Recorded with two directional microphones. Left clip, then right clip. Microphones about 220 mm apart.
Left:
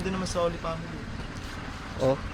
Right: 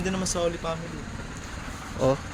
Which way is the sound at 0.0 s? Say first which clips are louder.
Right 1 dB; 40° right (ahead or behind).